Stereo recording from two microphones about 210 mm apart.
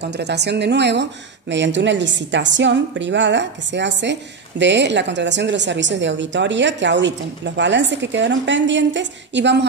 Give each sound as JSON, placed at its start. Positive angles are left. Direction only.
{"t": 0.0, "sound": "a woman's voice", "side_deg": -55}